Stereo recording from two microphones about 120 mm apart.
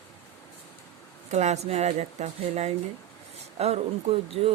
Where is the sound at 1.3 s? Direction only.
70° right (ahead or behind).